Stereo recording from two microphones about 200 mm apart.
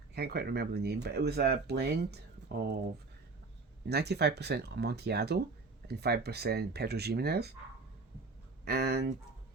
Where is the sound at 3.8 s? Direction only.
55° right (ahead or behind).